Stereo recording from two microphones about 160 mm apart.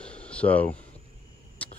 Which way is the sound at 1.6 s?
10° left (ahead or behind).